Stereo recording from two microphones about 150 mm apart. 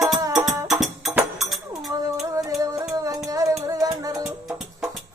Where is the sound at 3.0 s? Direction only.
20° right (ahead or behind).